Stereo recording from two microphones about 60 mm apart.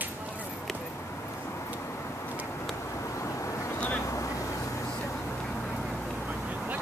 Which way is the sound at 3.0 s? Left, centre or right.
Left.